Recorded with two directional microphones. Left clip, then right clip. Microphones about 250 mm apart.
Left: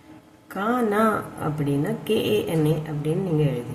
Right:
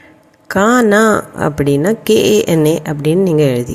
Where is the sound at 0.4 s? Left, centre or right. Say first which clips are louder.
Right 13 dB; right.